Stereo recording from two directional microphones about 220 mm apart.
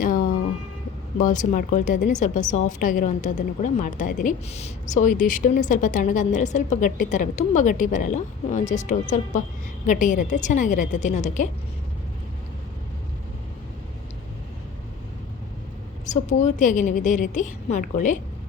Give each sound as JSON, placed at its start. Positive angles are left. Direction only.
{"t": 0.0, "sound": "a sound", "side_deg": 35}
{"t": 1.2, "sound": "a woman's voice", "side_deg": 35}
{"t": 16.0, "sound": "a woman's voice", "side_deg": 35}